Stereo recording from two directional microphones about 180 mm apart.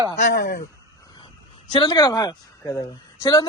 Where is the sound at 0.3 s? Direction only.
65° left (ahead or behind).